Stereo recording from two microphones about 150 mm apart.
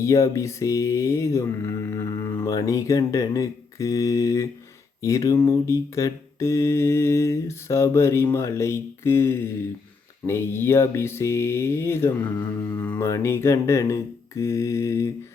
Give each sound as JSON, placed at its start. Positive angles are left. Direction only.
{"t": 0.0, "sound": "mantra", "side_deg": 20}